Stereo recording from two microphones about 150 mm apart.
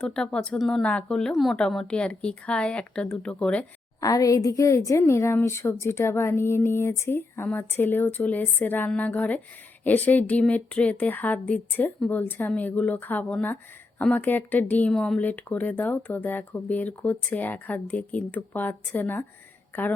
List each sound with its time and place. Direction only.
0.0 s a woman's voice: 5° left (ahead or behind)
4.0 s a woman's voice: 20° left (ahead or behind)